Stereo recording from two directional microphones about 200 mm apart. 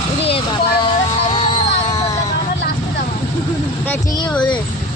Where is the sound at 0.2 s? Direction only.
30° left (ahead or behind).